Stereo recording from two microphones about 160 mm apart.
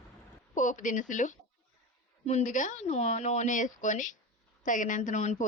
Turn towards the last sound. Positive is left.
turn(degrees=50)  # may be behind; listen again after turning